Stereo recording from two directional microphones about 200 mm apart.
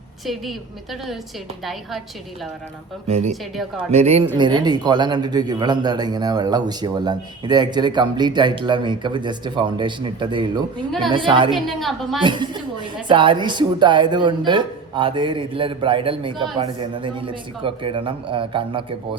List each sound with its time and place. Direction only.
3.1 s speech: 35° right (ahead or behind)
3.5 s a woman's voice: centre (ahead or behind)
3.9 s a man's voice: 30° right (ahead or behind)
11.5 s a woman's voice: centre (ahead or behind)
12.2 s a man's voice: 25° right (ahead or behind)